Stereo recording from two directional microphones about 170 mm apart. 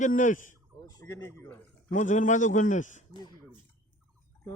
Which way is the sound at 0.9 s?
20° left (ahead or behind).